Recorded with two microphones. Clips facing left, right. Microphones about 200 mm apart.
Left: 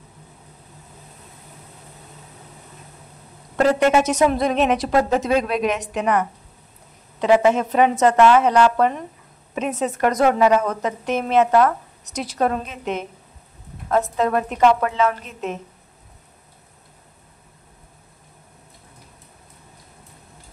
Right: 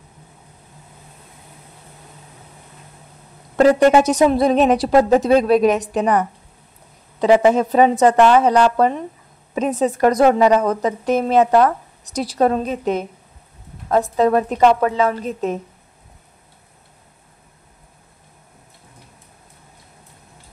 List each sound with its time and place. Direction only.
3.5 s a woman's voice: 35° right (ahead or behind)